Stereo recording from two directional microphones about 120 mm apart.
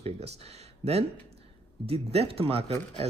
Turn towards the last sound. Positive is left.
turn(degrees=-55)  # may be behind; listen again after turning